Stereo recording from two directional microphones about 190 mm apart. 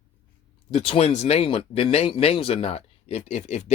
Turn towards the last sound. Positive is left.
turn(degrees=35)  # may be behind; listen again after turning